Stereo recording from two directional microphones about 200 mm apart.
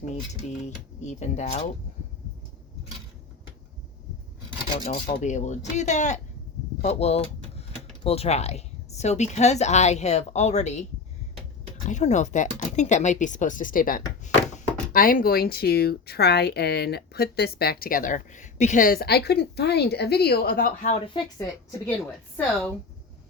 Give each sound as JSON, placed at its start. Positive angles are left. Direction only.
{"t": 0.6, "sound": "speech", "side_deg": 35}
{"t": 5.2, "sound": "speech", "side_deg": 35}
{"t": 11.9, "sound": "speech", "side_deg": 35}
{"t": 20.9, "sound": "speech", "side_deg": 25}
{"t": 21.7, "sound": "a woman's voice", "side_deg": 10}